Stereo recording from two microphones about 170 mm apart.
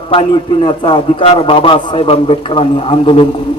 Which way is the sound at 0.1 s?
30° left (ahead or behind).